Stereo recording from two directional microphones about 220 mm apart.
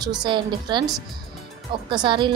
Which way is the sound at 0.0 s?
20° right (ahead or behind).